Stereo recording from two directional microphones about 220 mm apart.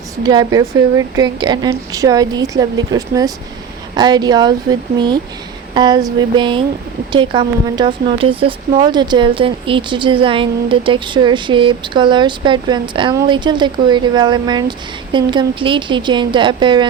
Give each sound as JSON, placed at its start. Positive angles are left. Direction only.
{"t": 0.2, "sound": "a woman's voice", "side_deg": -20}